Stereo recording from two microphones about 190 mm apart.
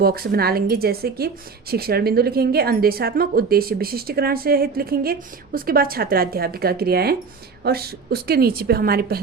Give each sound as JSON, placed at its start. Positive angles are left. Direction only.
{"t": 0.0, "sound": "speech", "side_deg": -55}